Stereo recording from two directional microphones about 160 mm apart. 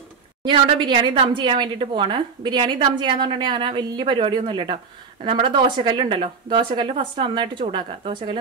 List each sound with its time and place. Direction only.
0.4 s a woman's voice: 30° right (ahead or behind)